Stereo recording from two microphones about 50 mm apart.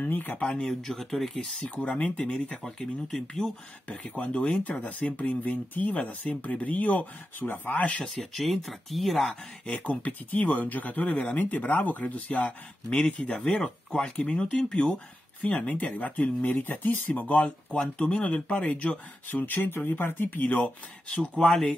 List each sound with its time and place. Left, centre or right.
0.1 s speech: left
0.7 s speech: centre
1.6 s speech: left
2.8 s speech: centre
4.2 s speech: left
8.0 s speech: centre
9.7 s speech: left
13.4 s speech: centre
15.4 s speech: left
17.1 s speech: left
21.5 s speech: centre